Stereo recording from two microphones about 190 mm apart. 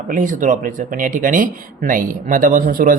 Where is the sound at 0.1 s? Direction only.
45° right (ahead or behind).